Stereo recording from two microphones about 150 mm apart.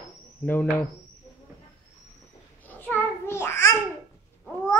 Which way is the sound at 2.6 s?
10° left (ahead or behind).